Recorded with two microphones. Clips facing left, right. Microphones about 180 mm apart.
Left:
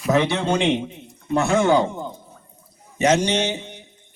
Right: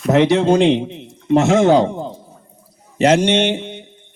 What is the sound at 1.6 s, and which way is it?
Speech, 35° right (ahead or behind).